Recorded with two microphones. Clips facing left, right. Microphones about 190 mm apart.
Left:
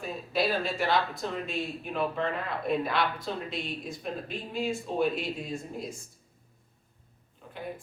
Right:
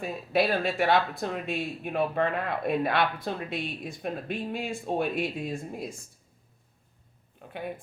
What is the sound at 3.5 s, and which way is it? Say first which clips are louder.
Speech: right 2 dB; 55° right (ahead or behind).